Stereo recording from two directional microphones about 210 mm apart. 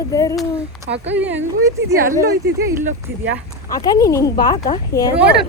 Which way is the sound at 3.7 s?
15° left (ahead or behind).